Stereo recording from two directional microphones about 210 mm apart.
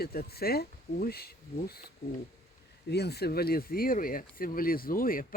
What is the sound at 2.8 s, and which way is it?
Speech, 50° left (ahead or behind).